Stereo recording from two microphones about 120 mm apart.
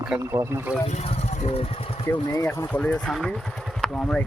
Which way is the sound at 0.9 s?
65° left (ahead or behind).